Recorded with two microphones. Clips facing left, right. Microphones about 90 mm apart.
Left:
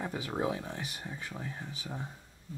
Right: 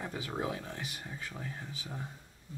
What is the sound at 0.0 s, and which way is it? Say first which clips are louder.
Speech: left 3 dB; 15° left (ahead or behind).